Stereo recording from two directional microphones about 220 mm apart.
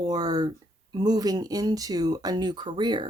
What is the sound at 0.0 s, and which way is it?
Speech, 20° right (ahead or behind).